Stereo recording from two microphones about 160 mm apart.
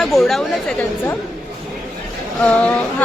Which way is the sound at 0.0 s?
Centre (ahead or behind).